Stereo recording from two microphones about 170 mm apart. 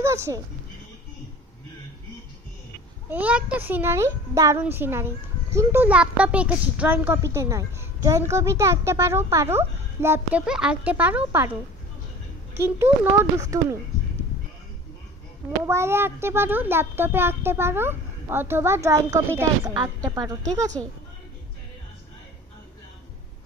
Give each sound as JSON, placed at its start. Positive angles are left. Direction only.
{"t": 0.0, "sound": "a sound", "side_deg": -15}
{"t": 3.1, "sound": "a child's voice", "side_deg": -10}
{"t": 12.5, "sound": "a child's voice", "side_deg": -15}
{"t": 15.6, "sound": "a child's voice", "side_deg": -15}